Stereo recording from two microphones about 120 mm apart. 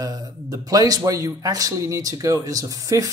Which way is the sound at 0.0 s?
30° right (ahead or behind).